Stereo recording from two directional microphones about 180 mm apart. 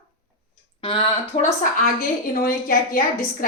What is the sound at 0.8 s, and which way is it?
Speech, 30° left (ahead or behind).